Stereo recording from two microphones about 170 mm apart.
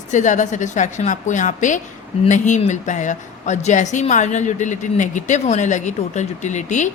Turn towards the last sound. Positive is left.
turn(degrees=45)  # may be behind; listen again after turning